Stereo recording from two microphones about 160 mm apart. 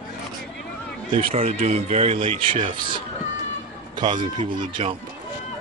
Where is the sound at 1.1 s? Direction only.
40° right (ahead or behind).